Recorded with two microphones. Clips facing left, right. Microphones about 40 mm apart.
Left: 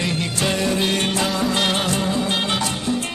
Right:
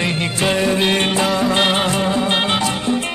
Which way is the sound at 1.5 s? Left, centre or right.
Right.